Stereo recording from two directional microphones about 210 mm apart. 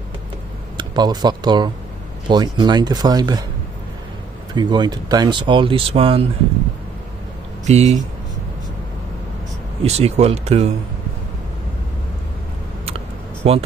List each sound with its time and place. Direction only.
0.7 s speech: 20° right (ahead or behind)
4.6 s speech: 20° right (ahead or behind)
7.6 s speech: 30° right (ahead or behind)
9.8 s speech: 30° right (ahead or behind)
12.8 s a sound: 30° right (ahead or behind)